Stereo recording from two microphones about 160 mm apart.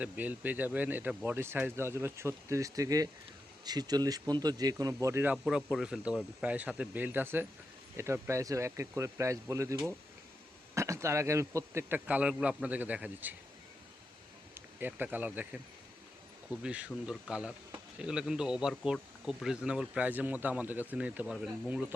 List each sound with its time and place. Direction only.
0.0 s speech: 10° right (ahead or behind)
14.5 s speech: 10° right (ahead or behind)